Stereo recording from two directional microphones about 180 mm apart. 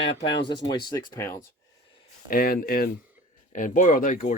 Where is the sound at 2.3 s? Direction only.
55° left (ahead or behind).